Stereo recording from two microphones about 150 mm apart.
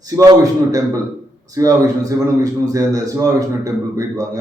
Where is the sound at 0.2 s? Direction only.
25° right (ahead or behind).